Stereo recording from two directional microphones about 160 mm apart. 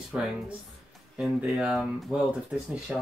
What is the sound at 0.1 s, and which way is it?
Speech, 10° right (ahead or behind).